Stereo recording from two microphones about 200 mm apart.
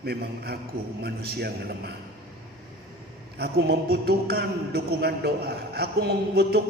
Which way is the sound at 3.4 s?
55° right (ahead or behind).